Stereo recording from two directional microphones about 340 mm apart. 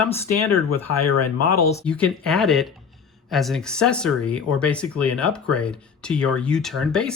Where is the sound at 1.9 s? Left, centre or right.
Centre.